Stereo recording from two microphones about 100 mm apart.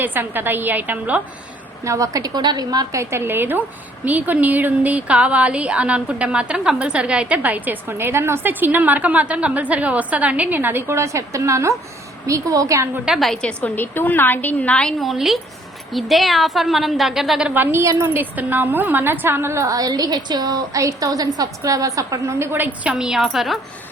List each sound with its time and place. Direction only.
0.0 s a woman's voice: 20° right (ahead or behind)
1.8 s a woman's voice: 35° right (ahead or behind)
13.1 s a woman's voice: centre (ahead or behind)
17.5 s a woman's voice: 20° right (ahead or behind); by 23.6 s centre (ahead or behind)